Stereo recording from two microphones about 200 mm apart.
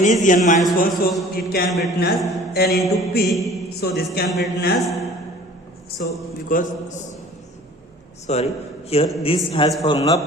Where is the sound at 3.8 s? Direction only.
50° left (ahead or behind).